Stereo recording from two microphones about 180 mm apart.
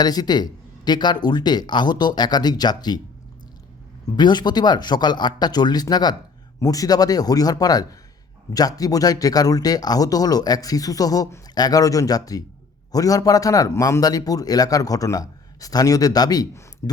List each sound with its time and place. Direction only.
0.0 s a man's voice: 20° left (ahead or behind)
4.2 s a man's voice: 25° left (ahead or behind)